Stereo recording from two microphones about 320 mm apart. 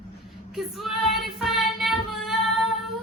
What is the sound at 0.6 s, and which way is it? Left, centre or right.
Child singing, centre.